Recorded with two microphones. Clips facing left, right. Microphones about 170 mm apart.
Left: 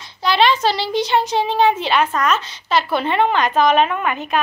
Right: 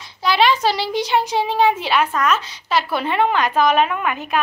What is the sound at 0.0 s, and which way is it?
Speech, 5° right (ahead or behind).